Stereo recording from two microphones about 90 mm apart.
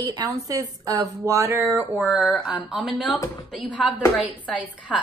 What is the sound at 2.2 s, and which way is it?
Speech, 5° left (ahead or behind).